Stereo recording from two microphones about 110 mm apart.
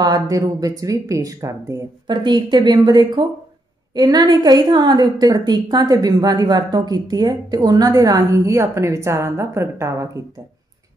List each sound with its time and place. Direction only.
0.0 s a woman's voice: 35° right (ahead or behind)
2.0 s a woman's voice: 40° right (ahead or behind); by 10.2 s 25° right (ahead or behind)